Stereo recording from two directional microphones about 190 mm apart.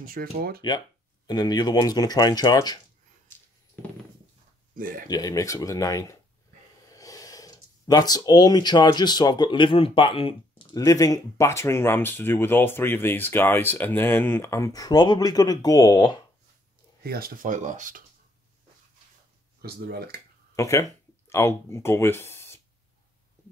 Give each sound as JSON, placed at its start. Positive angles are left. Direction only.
{"t": 0.0, "sound": "speech", "side_deg": -50}
{"t": 0.6, "sound": "speech", "side_deg": 20}
{"t": 4.7, "sound": "speech", "side_deg": -45}
{"t": 5.0, "sound": "speech", "side_deg": 20}
{"t": 17.0, "sound": "speech", "side_deg": -50}
{"t": 19.6, "sound": "speech", "side_deg": -55}
{"t": 20.5, "sound": "speech", "side_deg": 15}